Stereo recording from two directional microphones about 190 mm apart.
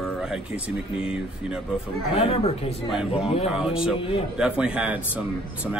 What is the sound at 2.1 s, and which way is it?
Speech, 30° left (ahead or behind).